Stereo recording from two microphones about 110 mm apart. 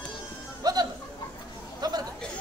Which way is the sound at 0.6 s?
35° right (ahead or behind).